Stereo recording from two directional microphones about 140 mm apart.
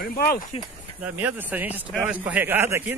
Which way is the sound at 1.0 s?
15° right (ahead or behind).